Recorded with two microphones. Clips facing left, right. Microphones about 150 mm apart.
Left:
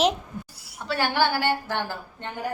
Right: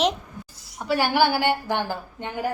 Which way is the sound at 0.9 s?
10° right (ahead or behind).